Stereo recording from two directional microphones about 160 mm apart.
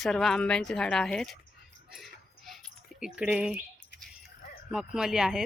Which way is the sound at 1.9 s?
Centre (ahead or behind).